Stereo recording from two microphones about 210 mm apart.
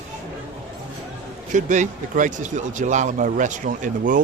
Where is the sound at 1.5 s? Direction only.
35° right (ahead or behind).